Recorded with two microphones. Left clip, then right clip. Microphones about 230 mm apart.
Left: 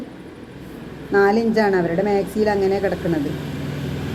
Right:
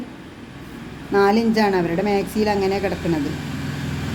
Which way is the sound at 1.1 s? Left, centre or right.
Centre.